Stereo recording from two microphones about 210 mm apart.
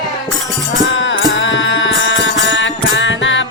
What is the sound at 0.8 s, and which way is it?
Music, 60° left (ahead or behind).